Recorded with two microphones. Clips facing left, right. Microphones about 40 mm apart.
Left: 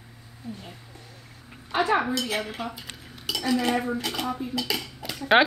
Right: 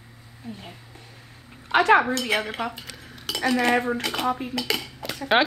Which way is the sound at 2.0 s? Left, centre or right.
Right.